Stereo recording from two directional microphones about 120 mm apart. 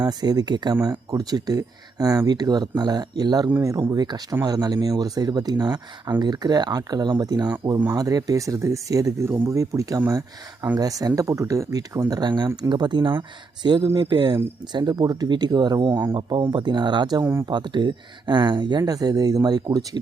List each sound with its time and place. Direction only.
0.0 s speech: 35° right (ahead or behind)